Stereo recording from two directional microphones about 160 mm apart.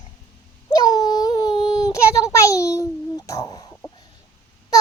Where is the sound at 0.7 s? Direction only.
25° left (ahead or behind).